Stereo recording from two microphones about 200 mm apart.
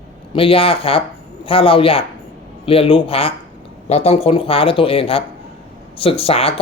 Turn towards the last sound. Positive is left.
turn(degrees=30)  # may be behind; listen again after turning